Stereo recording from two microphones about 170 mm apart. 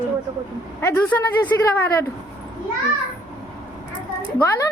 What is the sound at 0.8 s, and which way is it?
Speech, 10° left (ahead or behind).